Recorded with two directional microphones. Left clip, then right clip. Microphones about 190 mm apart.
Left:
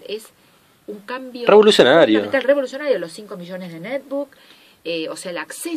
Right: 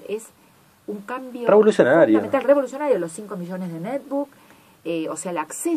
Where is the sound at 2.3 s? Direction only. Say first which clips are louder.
Left 1 dB; 15° left (ahead or behind).